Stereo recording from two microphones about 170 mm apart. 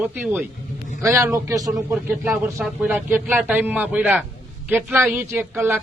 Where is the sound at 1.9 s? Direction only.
10° right (ahead or behind).